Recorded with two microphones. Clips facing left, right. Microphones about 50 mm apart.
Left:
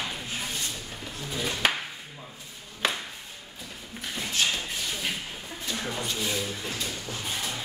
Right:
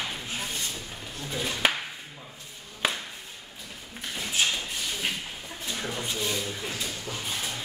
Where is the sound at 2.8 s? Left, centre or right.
Centre.